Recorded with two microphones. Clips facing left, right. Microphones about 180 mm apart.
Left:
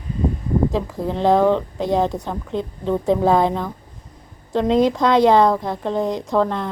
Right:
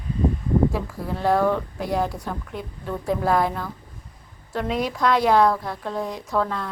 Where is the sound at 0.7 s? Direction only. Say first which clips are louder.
Left 6 dB; 20° left (ahead or behind).